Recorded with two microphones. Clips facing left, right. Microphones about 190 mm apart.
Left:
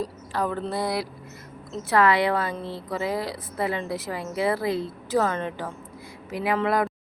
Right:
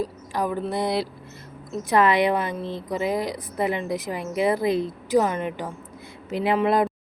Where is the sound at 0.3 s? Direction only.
10° right (ahead or behind).